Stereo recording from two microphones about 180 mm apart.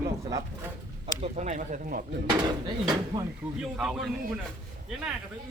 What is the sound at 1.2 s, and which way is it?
Speech, 40° right (ahead or behind).